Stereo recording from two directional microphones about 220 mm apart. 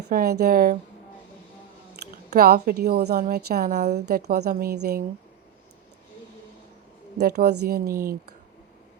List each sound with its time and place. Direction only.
0.1 s a woman's voice: 45° right (ahead or behind)
2.3 s a woman's voice: 40° right (ahead or behind)
7.2 s a woman's voice: 45° right (ahead or behind)